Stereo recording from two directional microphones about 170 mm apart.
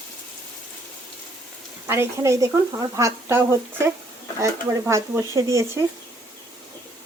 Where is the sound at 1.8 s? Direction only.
15° right (ahead or behind).